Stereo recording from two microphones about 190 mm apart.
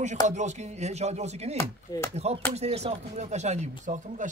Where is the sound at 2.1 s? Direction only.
35° right (ahead or behind).